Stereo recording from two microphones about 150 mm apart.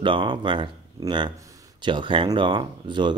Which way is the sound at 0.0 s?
35° right (ahead or behind).